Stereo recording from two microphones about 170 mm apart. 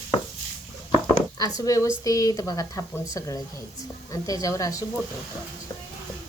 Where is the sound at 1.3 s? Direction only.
20° left (ahead or behind).